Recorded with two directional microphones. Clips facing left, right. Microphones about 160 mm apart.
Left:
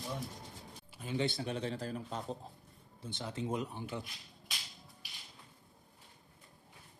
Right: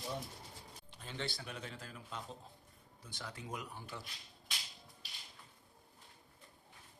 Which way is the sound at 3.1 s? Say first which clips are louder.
Left 9 dB; 25° left (ahead or behind).